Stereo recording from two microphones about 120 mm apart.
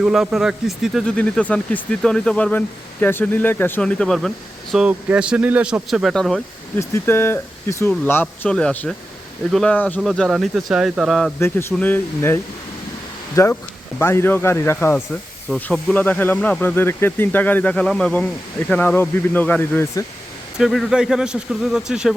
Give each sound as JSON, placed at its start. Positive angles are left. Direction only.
{"t": 0.0, "sound": "speech", "side_deg": -5}
{"t": 1.0, "sound": "speech", "side_deg": 10}
{"t": 4.7, "sound": "speech", "side_deg": -10}
{"t": 6.7, "sound": "speech", "side_deg": 20}
{"t": 9.7, "sound": "speech", "side_deg": 15}
{"t": 10.0, "sound": "speech", "side_deg": 0}
{"t": 11.3, "sound": "speech", "side_deg": 20}
{"t": 20.6, "sound": "speech", "side_deg": 0}